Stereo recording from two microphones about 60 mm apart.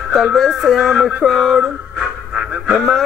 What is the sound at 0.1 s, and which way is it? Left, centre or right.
Music, centre.